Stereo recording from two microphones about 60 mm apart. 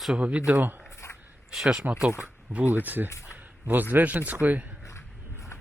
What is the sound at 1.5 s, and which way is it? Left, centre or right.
Speech, centre.